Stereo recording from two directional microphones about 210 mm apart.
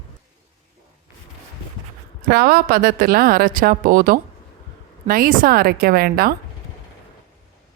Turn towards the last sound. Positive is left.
turn(degrees=-45)  # may be behind; listen again after turning